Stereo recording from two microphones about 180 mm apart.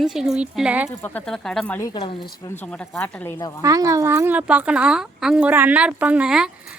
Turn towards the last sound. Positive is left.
turn(degrees=-5)  # may be behind; listen again after turning